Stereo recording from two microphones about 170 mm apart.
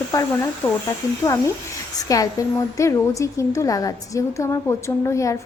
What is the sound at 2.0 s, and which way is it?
A woman's voice, 20° left (ahead or behind).